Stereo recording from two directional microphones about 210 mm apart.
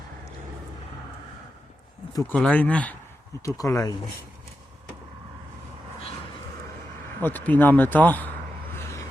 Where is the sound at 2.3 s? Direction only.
5° left (ahead or behind).